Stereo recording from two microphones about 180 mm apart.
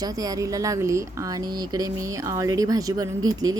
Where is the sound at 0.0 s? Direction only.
20° right (ahead or behind).